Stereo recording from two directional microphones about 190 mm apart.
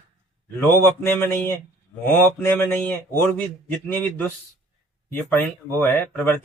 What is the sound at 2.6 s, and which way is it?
Speech, 10° left (ahead or behind).